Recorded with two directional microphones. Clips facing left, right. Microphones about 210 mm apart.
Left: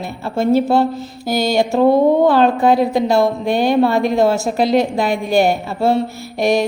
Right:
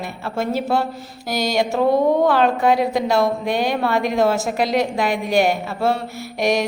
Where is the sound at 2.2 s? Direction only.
30° left (ahead or behind).